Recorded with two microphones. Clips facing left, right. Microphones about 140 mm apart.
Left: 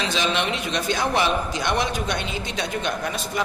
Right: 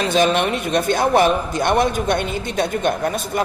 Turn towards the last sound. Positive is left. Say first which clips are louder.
# right 5 dB
turn(degrees=-50)  # may be behind; listen again after turning